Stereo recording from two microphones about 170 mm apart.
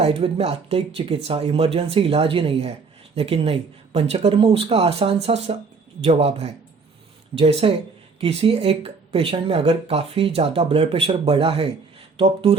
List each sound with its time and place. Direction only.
0.0 s speech: 35° right (ahead or behind)